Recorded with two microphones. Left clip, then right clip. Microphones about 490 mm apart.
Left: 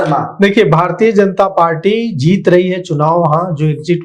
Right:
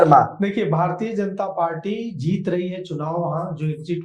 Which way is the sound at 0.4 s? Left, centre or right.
Left.